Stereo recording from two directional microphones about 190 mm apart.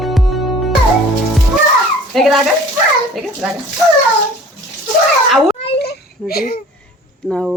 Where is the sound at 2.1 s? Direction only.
Centre (ahead or behind).